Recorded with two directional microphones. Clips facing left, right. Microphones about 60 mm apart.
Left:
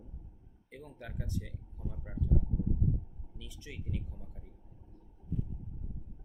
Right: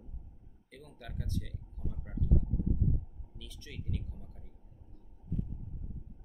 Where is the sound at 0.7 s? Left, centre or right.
Centre.